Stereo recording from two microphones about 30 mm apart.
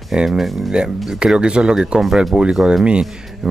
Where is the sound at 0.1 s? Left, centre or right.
Centre; by 2.7 s right.